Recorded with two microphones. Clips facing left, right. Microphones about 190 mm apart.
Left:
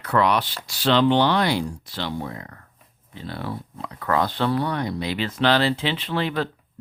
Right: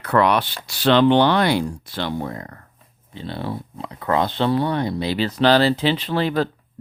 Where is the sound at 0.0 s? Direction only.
60° right (ahead or behind); by 2.6 s 40° right (ahead or behind).